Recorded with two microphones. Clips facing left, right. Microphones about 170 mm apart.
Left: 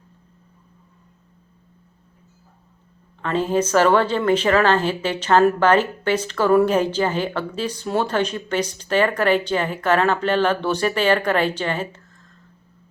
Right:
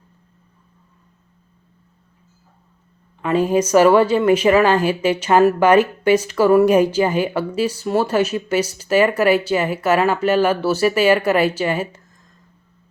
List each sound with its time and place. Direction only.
3.2 s a woman's voice: 10° right (ahead or behind)